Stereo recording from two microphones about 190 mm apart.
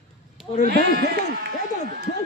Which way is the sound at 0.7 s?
60° right (ahead or behind).